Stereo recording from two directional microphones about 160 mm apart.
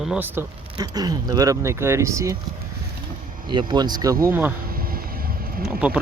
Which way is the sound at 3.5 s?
30° right (ahead or behind).